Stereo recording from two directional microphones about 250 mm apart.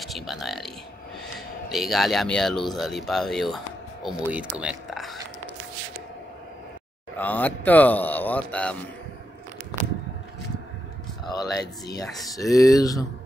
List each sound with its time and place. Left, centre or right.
0.0 s a sound: centre
1.7 s speech: centre
7.2 s a man's voice: centre
11.2 s a man's voice: centre